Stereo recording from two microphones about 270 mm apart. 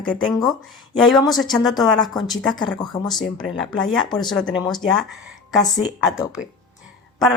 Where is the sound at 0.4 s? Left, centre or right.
Centre.